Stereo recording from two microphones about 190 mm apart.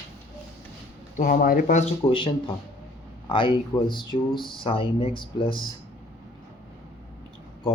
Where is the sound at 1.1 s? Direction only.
45° left (ahead or behind).